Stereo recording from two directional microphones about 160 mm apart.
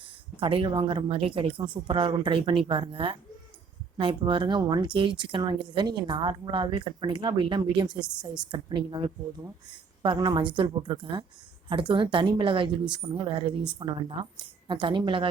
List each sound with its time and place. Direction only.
0.3 s a woman's voice: 30° right (ahead or behind)